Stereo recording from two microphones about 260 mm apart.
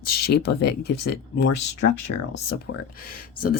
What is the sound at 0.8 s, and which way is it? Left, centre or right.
Speech, left.